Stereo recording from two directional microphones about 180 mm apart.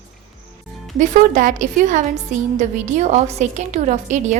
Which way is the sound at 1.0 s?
45° right (ahead or behind).